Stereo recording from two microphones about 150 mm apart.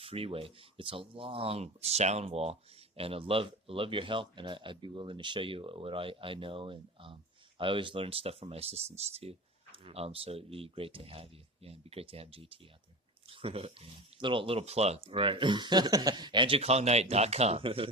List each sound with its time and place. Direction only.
0.0 s speech: 40° right (ahead or behind)